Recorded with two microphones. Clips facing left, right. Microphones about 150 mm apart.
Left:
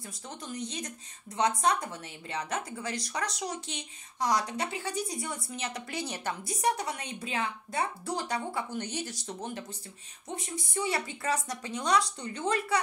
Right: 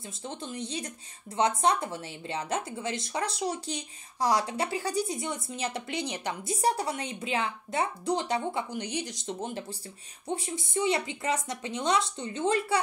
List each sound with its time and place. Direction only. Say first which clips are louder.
0.0 s speech: right 4 dB; 30° right (ahead or behind)
5.0 s speech: right 3 dB; 25° right (ahead or behind)
6.6 s speech: right 2 dB; 30° right (ahead or behind)